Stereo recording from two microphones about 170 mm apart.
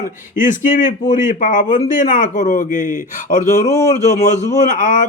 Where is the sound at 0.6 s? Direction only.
50° left (ahead or behind).